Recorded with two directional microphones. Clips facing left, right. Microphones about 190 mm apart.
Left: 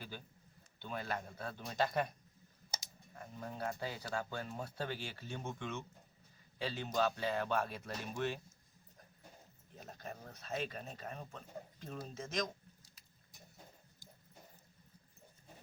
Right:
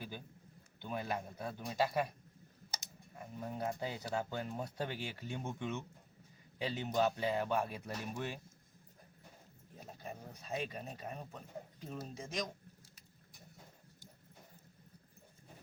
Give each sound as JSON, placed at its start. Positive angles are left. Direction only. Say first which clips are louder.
{"t": 0.8, "sound": "speech", "louder": "right 2 dB", "side_deg": -15}
{"t": 3.2, "sound": "speech", "louder": "right 2 dB", "side_deg": -10}
{"t": 9.7, "sound": "speech", "louder": "even", "side_deg": -10}